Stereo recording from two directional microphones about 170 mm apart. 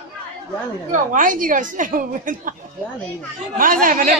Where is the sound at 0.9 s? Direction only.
50° right (ahead or behind).